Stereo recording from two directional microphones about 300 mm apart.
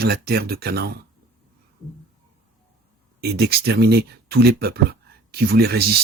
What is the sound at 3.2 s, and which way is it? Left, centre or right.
Speech, right.